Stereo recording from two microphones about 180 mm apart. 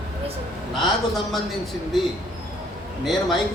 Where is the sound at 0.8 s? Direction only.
Centre (ahead or behind).